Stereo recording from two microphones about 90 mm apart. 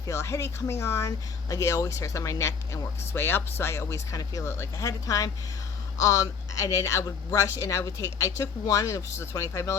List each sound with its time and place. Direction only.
0.0 s speech: 35° left (ahead or behind)